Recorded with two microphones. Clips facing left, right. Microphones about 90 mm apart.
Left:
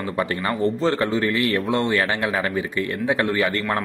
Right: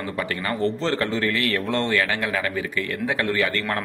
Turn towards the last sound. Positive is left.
turn(degrees=20)  # may be behind; listen again after turning